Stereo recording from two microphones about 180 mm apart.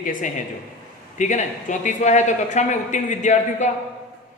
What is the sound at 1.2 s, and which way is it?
A man's voice, 40° left (ahead or behind).